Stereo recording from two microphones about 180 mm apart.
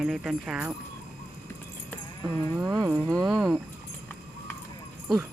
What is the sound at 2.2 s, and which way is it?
Speech, 20° right (ahead or behind).